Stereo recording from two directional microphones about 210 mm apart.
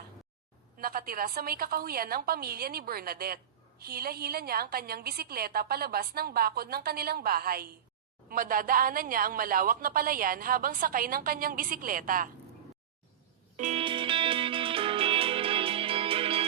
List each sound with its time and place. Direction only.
0.8 s a woman's voice: 45° right (ahead or behind)
13.6 s music: 30° right (ahead or behind)